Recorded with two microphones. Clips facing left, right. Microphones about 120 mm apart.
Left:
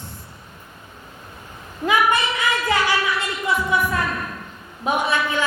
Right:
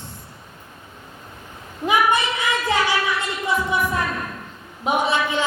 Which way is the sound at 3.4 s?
15° right (ahead or behind).